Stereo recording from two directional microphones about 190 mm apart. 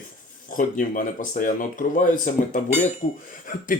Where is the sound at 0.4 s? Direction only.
45° left (ahead or behind).